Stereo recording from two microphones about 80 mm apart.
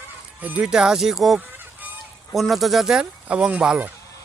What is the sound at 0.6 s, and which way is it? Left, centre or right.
Speech, centre.